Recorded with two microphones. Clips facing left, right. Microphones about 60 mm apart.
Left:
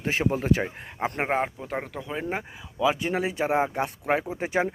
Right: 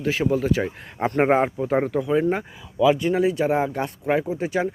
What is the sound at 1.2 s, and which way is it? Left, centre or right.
Speech, centre.